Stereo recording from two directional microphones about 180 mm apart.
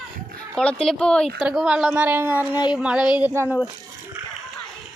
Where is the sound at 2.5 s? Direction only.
25° left (ahead or behind).